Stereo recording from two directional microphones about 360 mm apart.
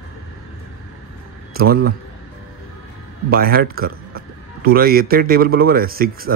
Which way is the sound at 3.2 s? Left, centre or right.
Right.